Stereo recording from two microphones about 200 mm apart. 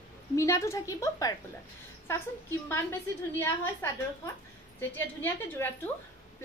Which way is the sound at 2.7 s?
10° left (ahead or behind).